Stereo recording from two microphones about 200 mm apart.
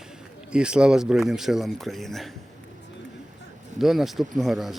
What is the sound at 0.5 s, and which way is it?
Speech, 5° right (ahead or behind).